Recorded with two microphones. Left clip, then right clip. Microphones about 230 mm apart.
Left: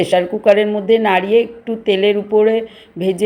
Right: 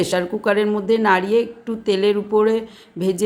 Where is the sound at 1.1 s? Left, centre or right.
Right.